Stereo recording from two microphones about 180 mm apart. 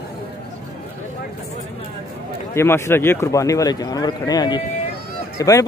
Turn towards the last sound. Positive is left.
turn(degrees=20)  # may be behind; listen again after turning